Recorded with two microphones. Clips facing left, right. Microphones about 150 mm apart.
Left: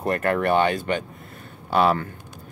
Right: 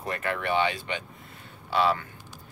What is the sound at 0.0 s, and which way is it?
Speech, 50° left (ahead or behind).